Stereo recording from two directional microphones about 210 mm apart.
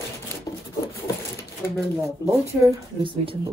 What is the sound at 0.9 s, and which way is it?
Sewing machine, 10° left (ahead or behind).